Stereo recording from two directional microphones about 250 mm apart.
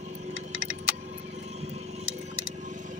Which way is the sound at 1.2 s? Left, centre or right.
Right.